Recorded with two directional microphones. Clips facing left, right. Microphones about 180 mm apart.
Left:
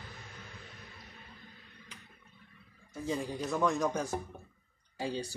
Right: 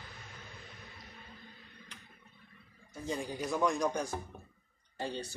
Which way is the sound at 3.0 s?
Centre (ahead or behind).